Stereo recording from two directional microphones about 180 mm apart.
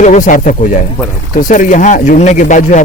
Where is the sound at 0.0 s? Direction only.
45° left (ahead or behind).